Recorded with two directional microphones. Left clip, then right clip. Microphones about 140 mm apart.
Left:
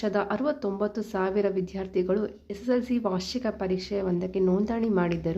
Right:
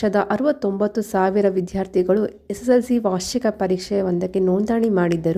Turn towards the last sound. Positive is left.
turn(degrees=-45)  # may be behind; listen again after turning